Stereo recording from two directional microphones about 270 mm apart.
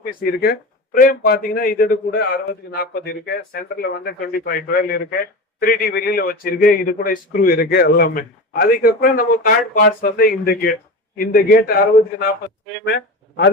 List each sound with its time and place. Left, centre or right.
0.0 s a man's voice: left
12.8 s speech: left